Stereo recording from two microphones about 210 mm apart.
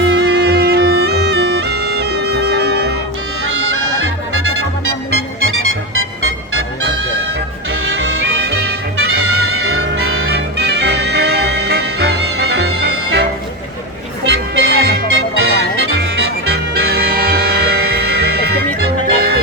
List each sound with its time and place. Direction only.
0.0 s music: 50° right (ahead or behind)
5.4 s music: 75° right (ahead or behind)
7.9 s music: 55° right (ahead or behind)
9.6 s music: 50° right (ahead or behind)
14.3 s music: 50° right (ahead or behind)